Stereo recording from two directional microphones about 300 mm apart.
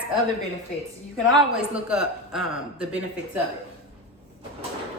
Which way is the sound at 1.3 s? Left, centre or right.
Centre.